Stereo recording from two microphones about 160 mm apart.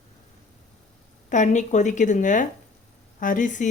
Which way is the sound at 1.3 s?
50° left (ahead or behind).